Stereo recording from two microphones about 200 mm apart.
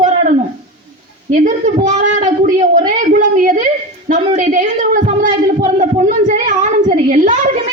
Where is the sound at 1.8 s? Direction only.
35° right (ahead or behind).